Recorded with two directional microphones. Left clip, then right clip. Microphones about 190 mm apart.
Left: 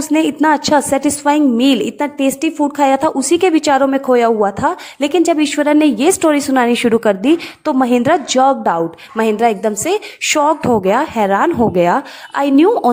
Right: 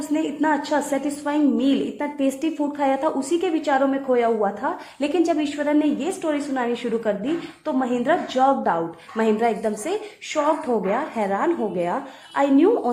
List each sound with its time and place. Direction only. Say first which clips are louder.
0.1 s a woman's voice: left 9 dB; 35° left (ahead or behind)
10.2 s a woman's voice: left 9 dB; 45° left (ahead or behind)